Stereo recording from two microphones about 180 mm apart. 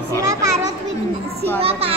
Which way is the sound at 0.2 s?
15° right (ahead or behind).